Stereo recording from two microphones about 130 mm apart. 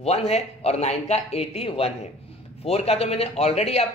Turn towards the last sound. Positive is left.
turn(degrees=55)  # may be behind; listen again after turning